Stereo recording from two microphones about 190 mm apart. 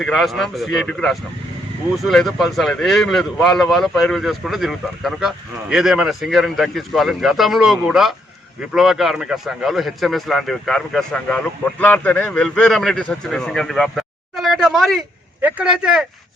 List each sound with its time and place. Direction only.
0.0 s speech: centre (ahead or behind)